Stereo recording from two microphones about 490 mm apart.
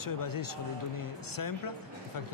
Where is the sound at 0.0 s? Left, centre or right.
Left.